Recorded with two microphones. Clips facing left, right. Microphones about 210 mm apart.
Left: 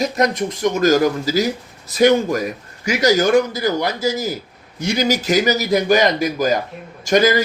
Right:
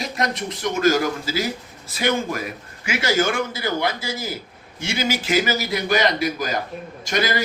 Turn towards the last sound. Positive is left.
turn(degrees=45)  # may be behind; listen again after turning